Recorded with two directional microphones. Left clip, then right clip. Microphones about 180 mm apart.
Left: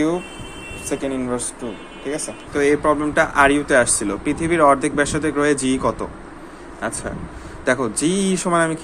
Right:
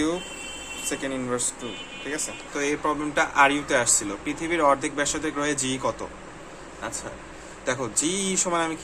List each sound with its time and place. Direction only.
0.9 s speech: 10° left (ahead or behind)
2.5 s speech: 20° left (ahead or behind)
6.8 s speech: 35° left (ahead or behind)